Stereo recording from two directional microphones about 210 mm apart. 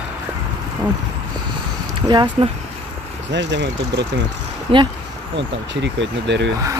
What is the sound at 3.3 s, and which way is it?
Speech, 55° right (ahead or behind).